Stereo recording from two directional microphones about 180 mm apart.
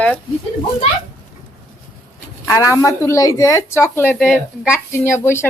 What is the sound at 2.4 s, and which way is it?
Speech, 15° left (ahead or behind).